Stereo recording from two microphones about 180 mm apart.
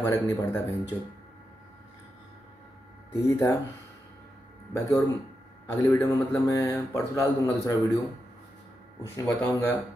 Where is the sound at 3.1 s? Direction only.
15° left (ahead or behind).